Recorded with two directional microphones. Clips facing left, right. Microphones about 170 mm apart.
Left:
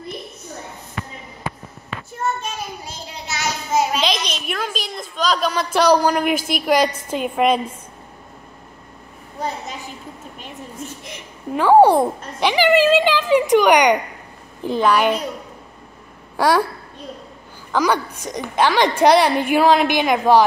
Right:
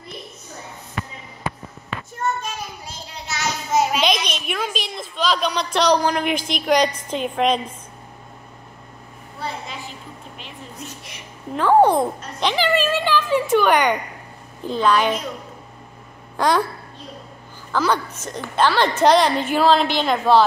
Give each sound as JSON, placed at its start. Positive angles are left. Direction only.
{"t": 3.3, "sound": "a sound", "side_deg": 5}
{"t": 4.3, "sound": "a woman's voice", "side_deg": -5}
{"t": 9.4, "sound": "a sound", "side_deg": 45}
{"t": 11.5, "sound": "a woman's voice", "side_deg": 10}
{"t": 16.3, "sound": "a child's voice", "side_deg": 10}
{"t": 17.7, "sound": "a woman's voice", "side_deg": 10}